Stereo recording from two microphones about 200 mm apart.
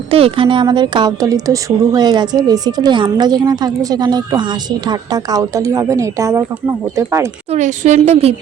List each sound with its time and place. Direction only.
0.1 s a woman's voice: 30° right (ahead or behind)
7.5 s a woman's voice: 35° right (ahead or behind)